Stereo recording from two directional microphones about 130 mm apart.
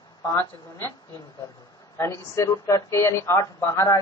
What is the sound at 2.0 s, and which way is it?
A woman's voice, 25° left (ahead or behind).